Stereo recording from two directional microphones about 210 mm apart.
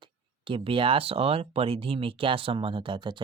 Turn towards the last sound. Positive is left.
turn(degrees=-20)  # may be behind; listen again after turning